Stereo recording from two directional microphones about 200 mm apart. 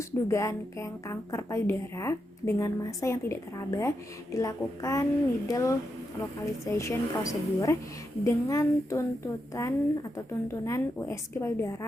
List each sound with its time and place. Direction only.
0.3 s a woman's voice: 15° left (ahead or behind)